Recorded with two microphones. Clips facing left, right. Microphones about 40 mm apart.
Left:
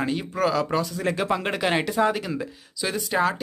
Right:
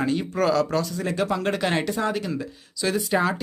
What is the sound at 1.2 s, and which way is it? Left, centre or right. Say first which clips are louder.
Speech: even; left.